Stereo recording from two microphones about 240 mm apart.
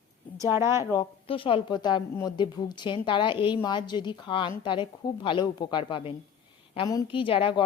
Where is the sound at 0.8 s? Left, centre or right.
Centre.